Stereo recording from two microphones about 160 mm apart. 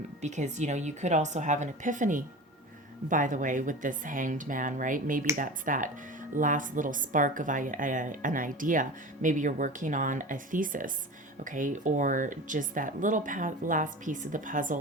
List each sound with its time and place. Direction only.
0.2 s speech: 45° right (ahead or behind)